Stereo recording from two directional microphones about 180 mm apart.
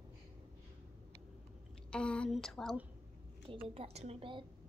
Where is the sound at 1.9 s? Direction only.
5° left (ahead or behind).